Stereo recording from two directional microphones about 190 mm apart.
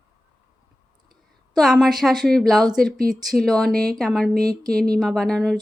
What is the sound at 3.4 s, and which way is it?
Speech, 5° left (ahead or behind).